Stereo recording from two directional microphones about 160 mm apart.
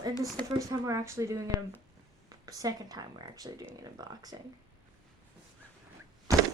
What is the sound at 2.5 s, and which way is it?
Speech, 20° right (ahead or behind).